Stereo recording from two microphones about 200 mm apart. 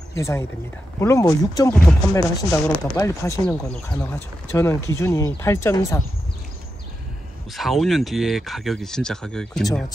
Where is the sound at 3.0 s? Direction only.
15° left (ahead or behind).